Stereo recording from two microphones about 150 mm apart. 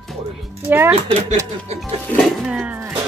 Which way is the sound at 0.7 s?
15° right (ahead or behind).